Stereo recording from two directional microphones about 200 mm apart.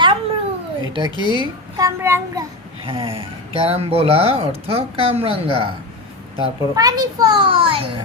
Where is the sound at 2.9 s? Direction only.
25° right (ahead or behind).